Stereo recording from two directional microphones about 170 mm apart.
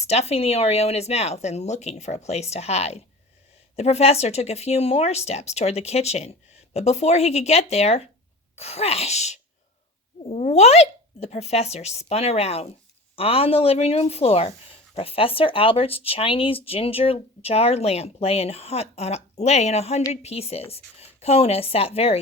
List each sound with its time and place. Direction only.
0.0 s speech: 40° left (ahead or behind)